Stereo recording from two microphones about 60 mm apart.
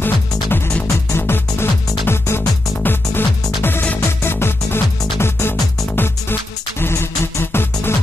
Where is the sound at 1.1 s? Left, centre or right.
Left.